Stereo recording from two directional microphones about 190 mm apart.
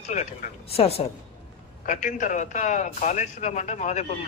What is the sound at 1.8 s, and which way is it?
A man's voice, 45° left (ahead or behind).